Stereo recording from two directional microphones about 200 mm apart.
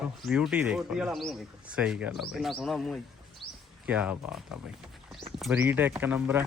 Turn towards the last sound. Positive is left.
turn(degrees=-10)  # may be behind; listen again after turning